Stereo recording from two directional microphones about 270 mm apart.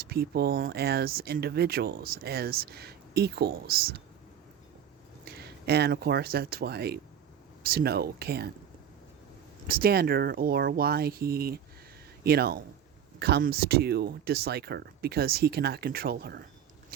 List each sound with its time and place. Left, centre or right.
0.0 s speech: right
5.2 s speech: right
9.6 s speech: right